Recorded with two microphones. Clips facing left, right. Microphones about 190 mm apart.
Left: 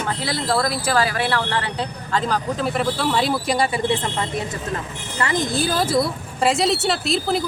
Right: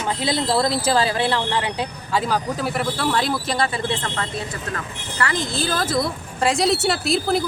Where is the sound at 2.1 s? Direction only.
5° right (ahead or behind).